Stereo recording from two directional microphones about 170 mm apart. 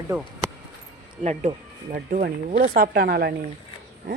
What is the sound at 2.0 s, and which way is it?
Speech, 60° right (ahead or behind).